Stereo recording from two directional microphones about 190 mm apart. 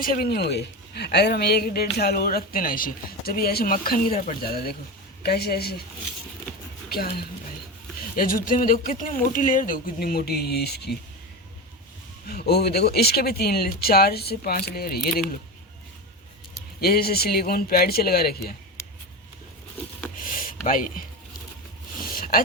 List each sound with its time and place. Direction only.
0.0 s speech: 50° left (ahead or behind)
6.9 s speech: 55° left (ahead or behind)
12.3 s speech: 55° left (ahead or behind)
16.8 s speech: 55° left (ahead or behind)
20.2 s a sound: 45° left (ahead or behind)
22.1 s a sound: 50° left (ahead or behind)